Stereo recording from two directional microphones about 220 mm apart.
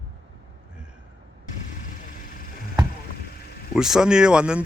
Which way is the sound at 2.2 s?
40° left (ahead or behind).